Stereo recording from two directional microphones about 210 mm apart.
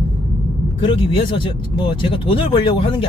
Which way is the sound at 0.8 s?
25° left (ahead or behind).